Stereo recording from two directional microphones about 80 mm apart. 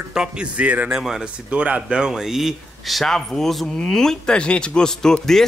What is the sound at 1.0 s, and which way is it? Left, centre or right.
Speech, centre.